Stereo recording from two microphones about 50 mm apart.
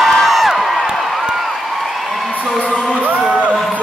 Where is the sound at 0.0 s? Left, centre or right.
Centre.